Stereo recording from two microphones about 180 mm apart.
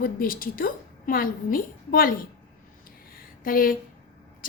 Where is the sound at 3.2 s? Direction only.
50° left (ahead or behind).